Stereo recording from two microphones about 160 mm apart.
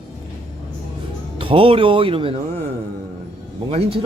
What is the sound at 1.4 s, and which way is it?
Speech, 35° right (ahead or behind).